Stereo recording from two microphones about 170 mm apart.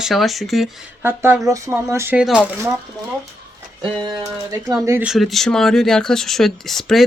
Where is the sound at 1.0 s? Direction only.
15° right (ahead or behind).